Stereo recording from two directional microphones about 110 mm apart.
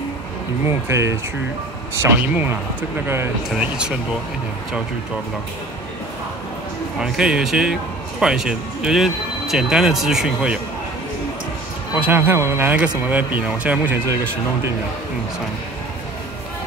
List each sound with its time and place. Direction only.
0.8 s speech: 25° right (ahead or behind)
2.0 s speech: 15° right (ahead or behind)
7.0 s speech: 5° right (ahead or behind)
11.9 s speech: 20° right (ahead or behind)